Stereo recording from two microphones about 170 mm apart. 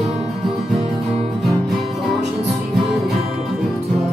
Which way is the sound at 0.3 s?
Centre (ahead or behind).